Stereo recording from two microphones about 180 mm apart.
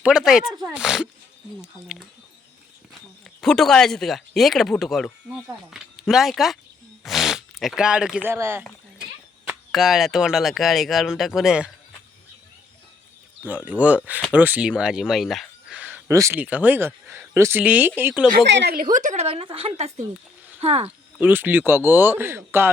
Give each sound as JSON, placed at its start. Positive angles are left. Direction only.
{"t": 0.0, "sound": "speech", "side_deg": -5}
{"t": 3.4, "sound": "speech", "side_deg": 5}
{"t": 9.7, "sound": "speech", "side_deg": 0}
{"t": 13.4, "sound": "a man's voice", "side_deg": -10}
{"t": 18.4, "sound": "a woman's voice", "side_deg": -75}
{"t": 21.2, "sound": "a man's voice", "side_deg": -10}